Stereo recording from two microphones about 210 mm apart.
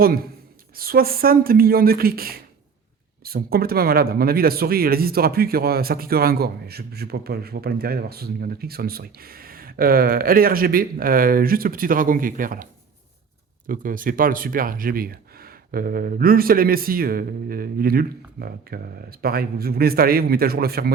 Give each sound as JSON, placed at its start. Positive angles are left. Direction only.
{"t": 0.0, "sound": "a man's voice", "side_deg": -45}
{"t": 13.7, "sound": "a man's voice", "side_deg": -40}